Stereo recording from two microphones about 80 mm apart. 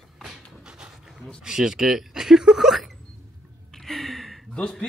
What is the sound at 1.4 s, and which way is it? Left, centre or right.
Speech, centre.